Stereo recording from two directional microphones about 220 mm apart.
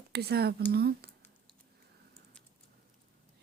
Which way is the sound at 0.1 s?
45° right (ahead or behind).